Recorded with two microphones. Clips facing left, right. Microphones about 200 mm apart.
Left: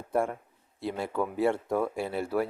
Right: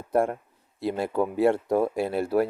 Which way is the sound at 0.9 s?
70° right (ahead or behind).